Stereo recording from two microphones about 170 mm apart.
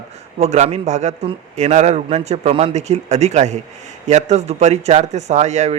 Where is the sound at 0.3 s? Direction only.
40° right (ahead or behind).